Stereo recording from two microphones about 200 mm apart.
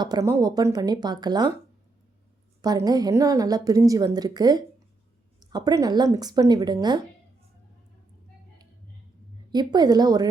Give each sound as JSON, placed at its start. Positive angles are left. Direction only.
{"t": 0.0, "sound": "a woman's voice", "side_deg": -15}
{"t": 2.6, "sound": "a woman's voice", "side_deg": -20}
{"t": 9.5, "sound": "a woman's voice", "side_deg": -20}